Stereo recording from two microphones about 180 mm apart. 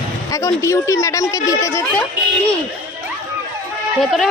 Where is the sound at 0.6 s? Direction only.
15° left (ahead or behind).